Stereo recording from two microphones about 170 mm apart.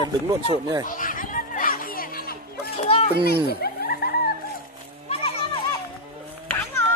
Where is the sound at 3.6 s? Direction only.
65° left (ahead or behind).